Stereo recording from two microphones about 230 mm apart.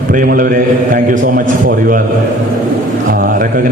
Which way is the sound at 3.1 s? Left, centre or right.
Right.